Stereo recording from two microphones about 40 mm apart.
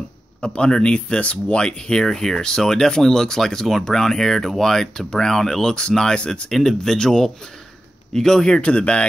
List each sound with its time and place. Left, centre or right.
0.4 s speech: left
6.1 s speech: left
6.5 s speech: centre
8.6 s speech: left